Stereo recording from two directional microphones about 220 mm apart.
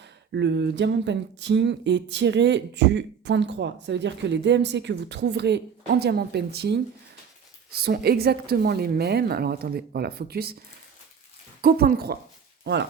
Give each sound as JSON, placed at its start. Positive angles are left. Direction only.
{"t": 0.0, "sound": "speech", "side_deg": -50}
{"t": 11.6, "sound": "speech", "side_deg": -45}